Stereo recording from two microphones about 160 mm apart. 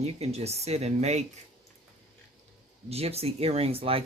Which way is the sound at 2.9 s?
40° right (ahead or behind).